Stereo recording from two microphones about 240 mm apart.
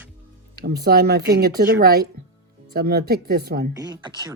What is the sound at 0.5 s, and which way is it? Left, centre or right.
Speech, right.